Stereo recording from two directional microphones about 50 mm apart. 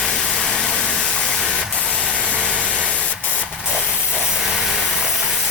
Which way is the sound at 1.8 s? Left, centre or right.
Right.